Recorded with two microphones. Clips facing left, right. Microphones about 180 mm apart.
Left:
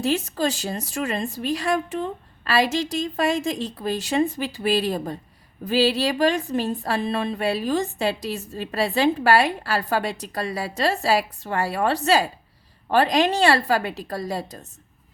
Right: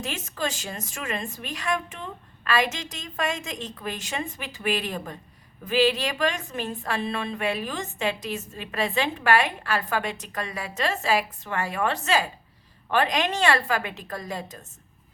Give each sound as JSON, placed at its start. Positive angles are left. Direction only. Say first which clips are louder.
{"t": 0.0, "sound": "speech", "louder": "left 8 dB", "side_deg": 35}